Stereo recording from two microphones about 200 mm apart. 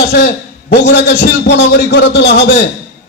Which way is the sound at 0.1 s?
55° left (ahead or behind).